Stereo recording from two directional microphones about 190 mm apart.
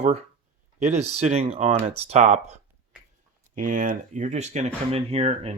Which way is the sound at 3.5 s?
45° right (ahead or behind).